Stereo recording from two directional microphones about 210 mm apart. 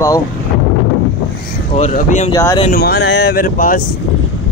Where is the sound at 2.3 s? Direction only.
15° left (ahead or behind).